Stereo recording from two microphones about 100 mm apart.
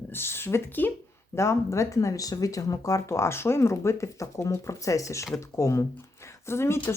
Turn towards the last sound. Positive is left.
turn(degrees=25)  # may be behind; listen again after turning